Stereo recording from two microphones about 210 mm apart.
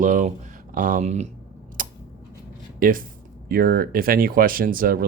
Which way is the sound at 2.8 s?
40° right (ahead or behind).